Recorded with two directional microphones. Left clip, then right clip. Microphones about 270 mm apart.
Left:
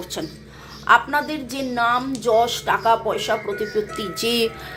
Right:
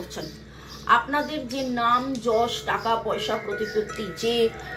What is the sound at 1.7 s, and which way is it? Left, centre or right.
A woman's voice, left.